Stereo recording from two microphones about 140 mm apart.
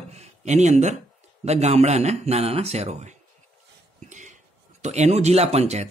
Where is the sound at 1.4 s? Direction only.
50° right (ahead or behind).